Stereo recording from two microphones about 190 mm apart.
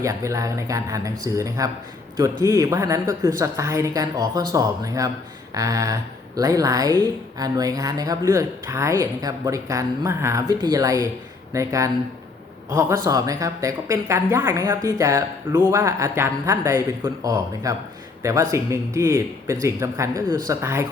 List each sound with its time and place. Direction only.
0.0 s speech: 15° right (ahead or behind)
13.1 s speech: 20° right (ahead or behind)